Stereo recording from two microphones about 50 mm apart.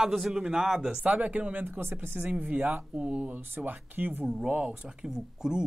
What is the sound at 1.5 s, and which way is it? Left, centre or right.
Speech, right.